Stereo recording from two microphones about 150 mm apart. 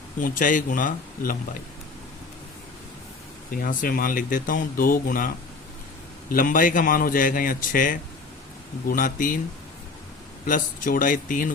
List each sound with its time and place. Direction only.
0.2 s speech: 65° left (ahead or behind)
3.5 s speech: 65° left (ahead or behind)
10.4 s speech: 65° left (ahead or behind)